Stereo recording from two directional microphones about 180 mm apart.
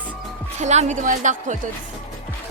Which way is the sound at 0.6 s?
40° right (ahead or behind).